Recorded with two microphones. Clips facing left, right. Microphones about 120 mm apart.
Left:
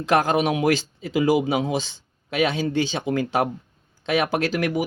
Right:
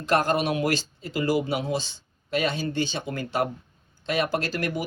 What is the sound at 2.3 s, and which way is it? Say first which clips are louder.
Speech: left 4 dB; 90° left.